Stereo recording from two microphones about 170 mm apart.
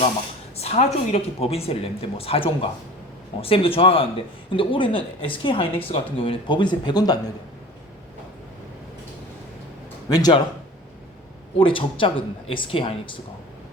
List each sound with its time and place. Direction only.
0.5 s a sound: 40° left (ahead or behind)
1.1 s speech: 35° left (ahead or behind)
10.1 s speech: 25° left (ahead or behind)
11.5 s speech: 30° left (ahead or behind)